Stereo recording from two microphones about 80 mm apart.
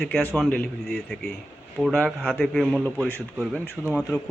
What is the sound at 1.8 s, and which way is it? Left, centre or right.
Speech, centre.